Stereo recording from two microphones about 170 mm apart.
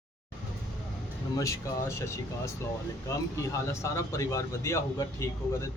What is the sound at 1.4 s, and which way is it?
Speech, 15° left (ahead or behind).